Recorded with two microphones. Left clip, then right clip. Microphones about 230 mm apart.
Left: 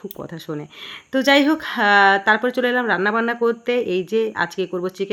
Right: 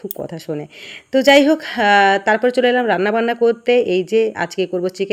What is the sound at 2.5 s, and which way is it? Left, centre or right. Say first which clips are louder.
Speech: right 4 dB; left.